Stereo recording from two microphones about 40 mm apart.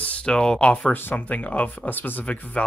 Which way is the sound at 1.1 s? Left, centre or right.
Left.